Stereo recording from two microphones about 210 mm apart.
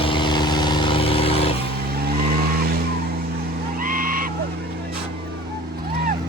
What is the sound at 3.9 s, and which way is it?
Frog, 40° right (ahead or behind).